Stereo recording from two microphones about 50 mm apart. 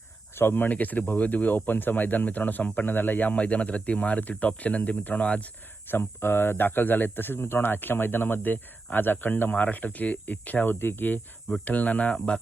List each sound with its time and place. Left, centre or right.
0.3 s speech: left
0.7 s speech: left
5.9 s speech: left
11.6 s speech: left